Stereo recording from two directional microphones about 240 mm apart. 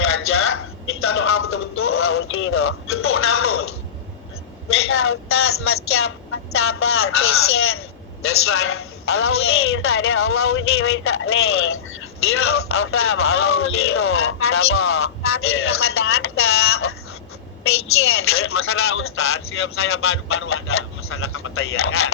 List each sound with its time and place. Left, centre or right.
0.0 s a sound: left
1.0 s radio: left
4.7 s a man's voice: left